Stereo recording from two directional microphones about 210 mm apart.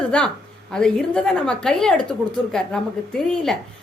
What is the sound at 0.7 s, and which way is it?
A woman's voice, 5° left (ahead or behind).